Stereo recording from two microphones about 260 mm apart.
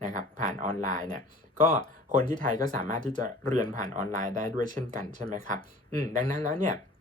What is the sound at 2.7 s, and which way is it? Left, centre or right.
Speech, right.